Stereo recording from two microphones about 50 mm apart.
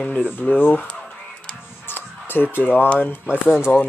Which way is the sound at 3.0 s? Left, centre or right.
Left.